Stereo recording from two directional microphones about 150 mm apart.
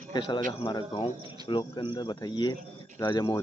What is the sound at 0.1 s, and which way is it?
Speech, 30° left (ahead or behind).